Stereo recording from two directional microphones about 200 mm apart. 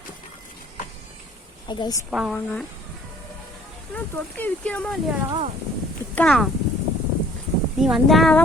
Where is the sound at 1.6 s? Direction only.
20° left (ahead or behind).